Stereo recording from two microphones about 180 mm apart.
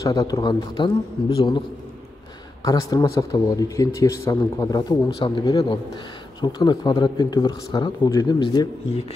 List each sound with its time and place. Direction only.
0.0 s speech: 20° left (ahead or behind)
2.6 s speech: 20° left (ahead or behind)